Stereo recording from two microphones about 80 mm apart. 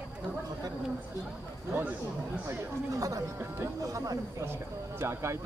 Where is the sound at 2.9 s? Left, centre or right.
Right.